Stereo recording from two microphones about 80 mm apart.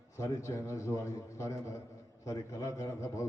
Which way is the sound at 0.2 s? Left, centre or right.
Left.